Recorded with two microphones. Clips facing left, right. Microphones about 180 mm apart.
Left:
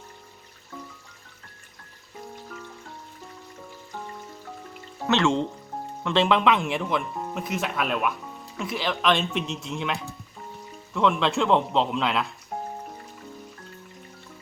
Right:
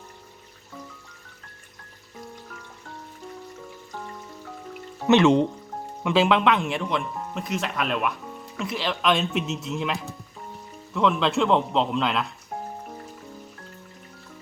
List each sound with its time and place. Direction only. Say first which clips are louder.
5.0 s speech: right 5 dB; 20° right (ahead or behind); by 12.3 s centre (ahead or behind)